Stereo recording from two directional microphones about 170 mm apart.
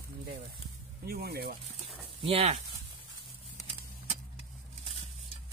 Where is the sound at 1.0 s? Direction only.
65° right (ahead or behind).